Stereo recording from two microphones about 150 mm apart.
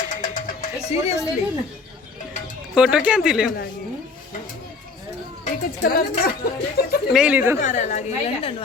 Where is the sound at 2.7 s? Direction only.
5° right (ahead or behind).